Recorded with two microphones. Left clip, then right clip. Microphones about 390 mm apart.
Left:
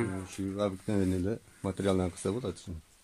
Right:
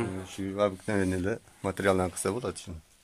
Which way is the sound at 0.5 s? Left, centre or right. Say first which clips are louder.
Right 5 dB; right.